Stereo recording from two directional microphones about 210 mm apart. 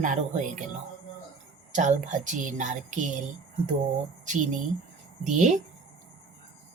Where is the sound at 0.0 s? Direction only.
35° right (ahead or behind).